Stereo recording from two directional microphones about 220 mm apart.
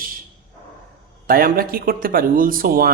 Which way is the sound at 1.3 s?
40° right (ahead or behind).